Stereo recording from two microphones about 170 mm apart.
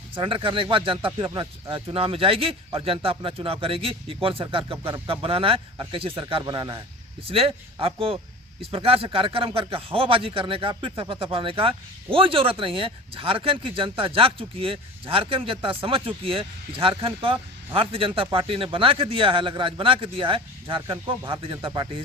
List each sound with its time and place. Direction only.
0.1 s speech: 30° right (ahead or behind)